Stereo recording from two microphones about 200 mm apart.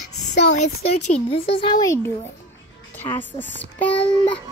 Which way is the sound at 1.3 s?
25° left (ahead or behind).